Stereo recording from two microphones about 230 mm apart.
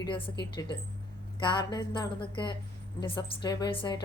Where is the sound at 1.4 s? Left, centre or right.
Centre.